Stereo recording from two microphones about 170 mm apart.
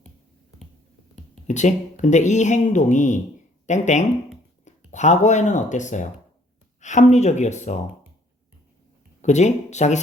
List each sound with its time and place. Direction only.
1.5 s speech: 45° left (ahead or behind)
9.2 s speech: 45° left (ahead or behind)